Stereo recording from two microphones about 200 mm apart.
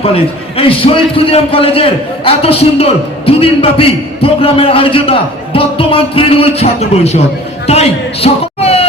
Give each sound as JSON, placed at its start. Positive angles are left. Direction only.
{"t": 0.0, "sound": "a man's voice", "side_deg": 30}